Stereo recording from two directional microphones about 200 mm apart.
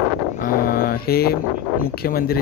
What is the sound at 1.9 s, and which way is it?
Speech, 50° left (ahead or behind).